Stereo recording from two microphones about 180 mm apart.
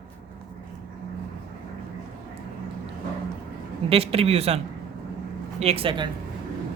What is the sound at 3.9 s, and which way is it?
Speech, 30° right (ahead or behind).